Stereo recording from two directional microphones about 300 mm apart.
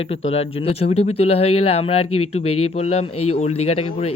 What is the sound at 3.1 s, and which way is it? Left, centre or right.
Speech, left.